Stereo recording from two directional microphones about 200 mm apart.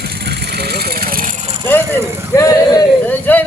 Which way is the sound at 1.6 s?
10° left (ahead or behind).